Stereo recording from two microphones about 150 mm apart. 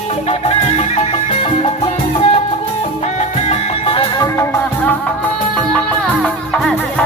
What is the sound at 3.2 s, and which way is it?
Music, 45° left (ahead or behind).